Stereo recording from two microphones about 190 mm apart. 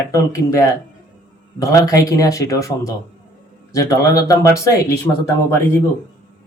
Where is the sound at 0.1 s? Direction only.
15° left (ahead or behind).